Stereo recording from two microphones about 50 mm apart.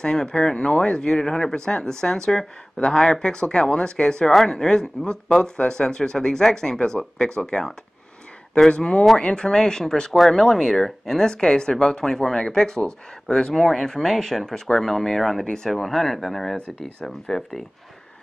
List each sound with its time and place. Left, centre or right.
0.0 s speech: centre